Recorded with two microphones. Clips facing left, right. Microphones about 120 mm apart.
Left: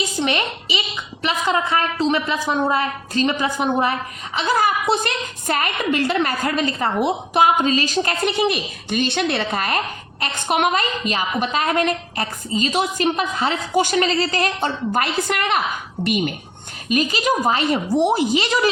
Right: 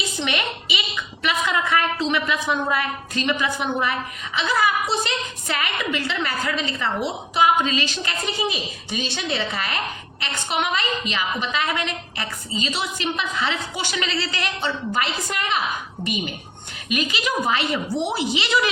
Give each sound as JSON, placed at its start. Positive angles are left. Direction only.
{"t": 0.2, "sound": "a woman's voice", "side_deg": 35}
{"t": 8.2, "sound": "a woman's voice", "side_deg": 60}
{"t": 16.9, "sound": "a woman's voice", "side_deg": 40}